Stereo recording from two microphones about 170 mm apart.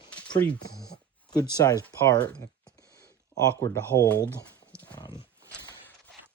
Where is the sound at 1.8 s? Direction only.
15° left (ahead or behind).